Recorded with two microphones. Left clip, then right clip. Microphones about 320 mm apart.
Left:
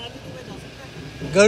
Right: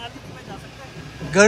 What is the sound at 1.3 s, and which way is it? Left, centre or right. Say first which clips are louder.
Speech: even; centre.